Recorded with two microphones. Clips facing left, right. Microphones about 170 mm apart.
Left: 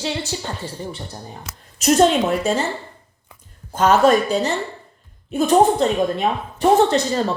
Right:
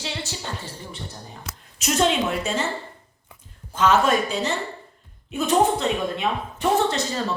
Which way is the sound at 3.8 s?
40° left (ahead or behind).